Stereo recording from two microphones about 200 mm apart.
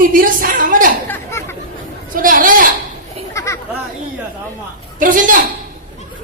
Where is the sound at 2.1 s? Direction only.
45° right (ahead or behind).